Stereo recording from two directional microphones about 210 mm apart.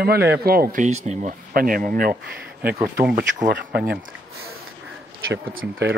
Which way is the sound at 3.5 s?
50° right (ahead or behind).